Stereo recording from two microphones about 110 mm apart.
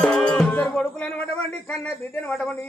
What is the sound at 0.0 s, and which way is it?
Music, 10° left (ahead or behind).